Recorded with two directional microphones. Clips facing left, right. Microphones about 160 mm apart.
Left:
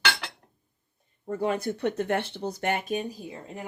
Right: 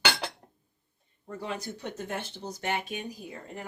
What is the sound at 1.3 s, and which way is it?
Speech, 55° left (ahead or behind).